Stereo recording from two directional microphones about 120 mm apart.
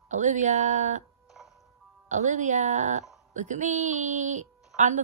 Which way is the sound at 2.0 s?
75° right (ahead or behind).